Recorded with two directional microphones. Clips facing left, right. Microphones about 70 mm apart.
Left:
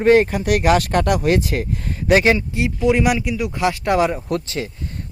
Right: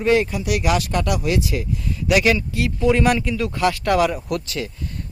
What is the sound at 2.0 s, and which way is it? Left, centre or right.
Speech, left.